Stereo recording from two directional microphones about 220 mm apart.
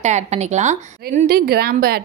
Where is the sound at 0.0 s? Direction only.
30° right (ahead or behind).